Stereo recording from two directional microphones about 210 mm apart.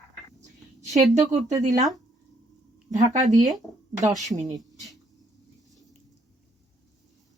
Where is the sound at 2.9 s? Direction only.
35° right (ahead or behind).